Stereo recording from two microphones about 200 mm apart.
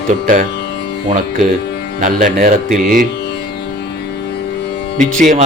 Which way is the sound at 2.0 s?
40° right (ahead or behind).